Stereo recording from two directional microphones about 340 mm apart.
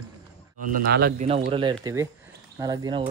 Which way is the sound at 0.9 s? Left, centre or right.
Right.